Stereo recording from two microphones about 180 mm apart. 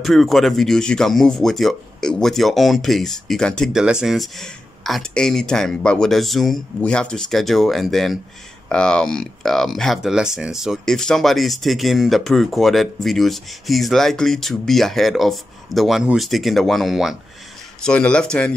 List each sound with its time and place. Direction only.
0.0 s speech: centre (ahead or behind)